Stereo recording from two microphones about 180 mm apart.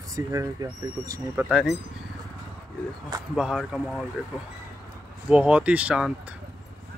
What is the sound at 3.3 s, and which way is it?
Speech, 5° right (ahead or behind).